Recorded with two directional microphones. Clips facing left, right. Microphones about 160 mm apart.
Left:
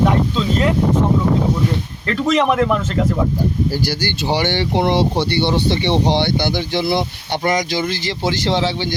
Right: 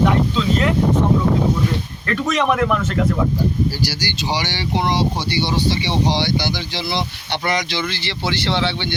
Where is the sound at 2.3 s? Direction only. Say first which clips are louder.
Left 3 dB; 25° left (ahead or behind).